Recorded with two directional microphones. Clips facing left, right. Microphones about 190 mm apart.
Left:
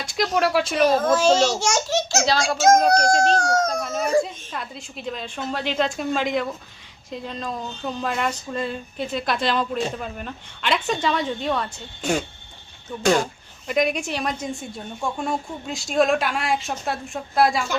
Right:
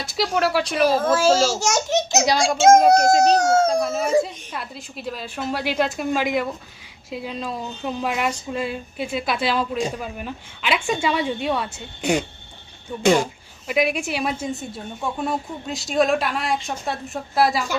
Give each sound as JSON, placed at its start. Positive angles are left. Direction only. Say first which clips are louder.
{"t": 0.1, "sound": "a woman's voice", "louder": "even", "side_deg": -5}
{"t": 1.9, "sound": "a sound", "louder": "right 2 dB", "side_deg": -20}
{"t": 2.5, "sound": "speech", "louder": "right 3 dB", "side_deg": -25}
{"t": 2.8, "sound": "a woman's voice", "louder": "right 4 dB", "side_deg": -5}
{"t": 3.3, "sound": "a sound", "louder": "right 4 dB", "side_deg": -25}
{"t": 3.8, "sound": "a woman's voice", "louder": "right 1 dB", "side_deg": -5}